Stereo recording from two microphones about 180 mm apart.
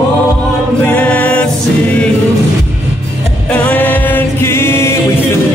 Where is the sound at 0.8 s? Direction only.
5° left (ahead or behind).